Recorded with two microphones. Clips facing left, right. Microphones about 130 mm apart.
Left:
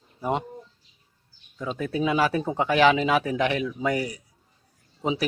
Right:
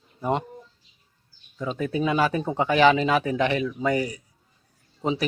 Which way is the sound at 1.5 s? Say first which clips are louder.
Right 1 dB; centre (ahead or behind).